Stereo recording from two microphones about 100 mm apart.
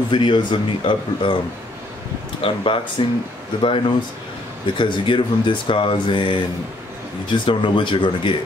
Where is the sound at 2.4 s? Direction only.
65° left (ahead or behind).